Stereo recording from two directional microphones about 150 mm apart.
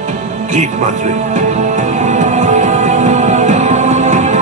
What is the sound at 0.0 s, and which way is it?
Music, 50° right (ahead or behind).